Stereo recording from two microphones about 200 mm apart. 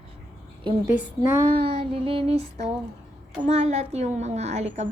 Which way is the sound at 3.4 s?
35° right (ahead or behind).